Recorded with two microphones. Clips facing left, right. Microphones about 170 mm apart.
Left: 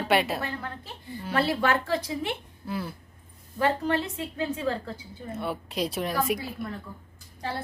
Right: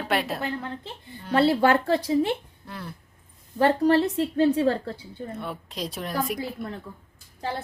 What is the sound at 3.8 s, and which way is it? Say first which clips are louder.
Speech: right 8 dB; 35° right (ahead or behind).